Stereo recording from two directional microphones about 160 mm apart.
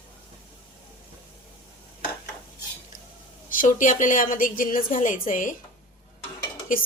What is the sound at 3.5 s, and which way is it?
A woman's voice, 55° left (ahead or behind).